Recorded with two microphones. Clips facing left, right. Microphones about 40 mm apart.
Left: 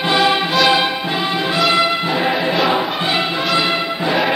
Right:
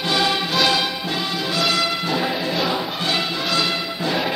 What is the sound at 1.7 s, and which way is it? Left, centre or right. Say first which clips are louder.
Music: left 5 dB; left.